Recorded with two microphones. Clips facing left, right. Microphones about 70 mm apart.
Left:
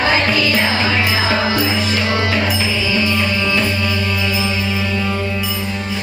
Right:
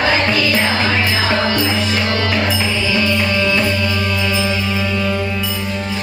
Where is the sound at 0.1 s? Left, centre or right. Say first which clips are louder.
Even; centre.